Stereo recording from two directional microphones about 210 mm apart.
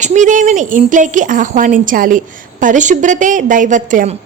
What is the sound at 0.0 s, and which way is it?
A woman's voice, 35° right (ahead or behind).